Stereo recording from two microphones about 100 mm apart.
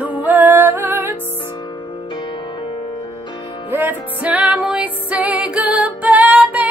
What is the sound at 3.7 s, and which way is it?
Music, 20° right (ahead or behind).